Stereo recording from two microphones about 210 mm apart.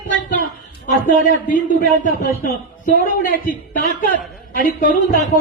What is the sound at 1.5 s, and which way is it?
A man's voice, 40° left (ahead or behind).